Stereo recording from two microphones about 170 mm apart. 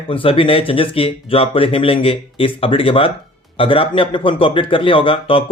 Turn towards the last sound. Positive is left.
turn(degrees=30)  # may be behind; listen again after turning